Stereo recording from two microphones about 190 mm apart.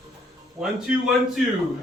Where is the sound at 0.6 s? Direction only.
5° right (ahead or behind).